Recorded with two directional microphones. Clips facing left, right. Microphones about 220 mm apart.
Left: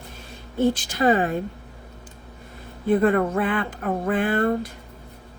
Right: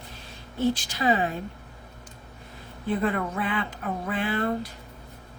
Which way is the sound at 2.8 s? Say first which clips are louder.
Left 7 dB; 50° left (ahead or behind).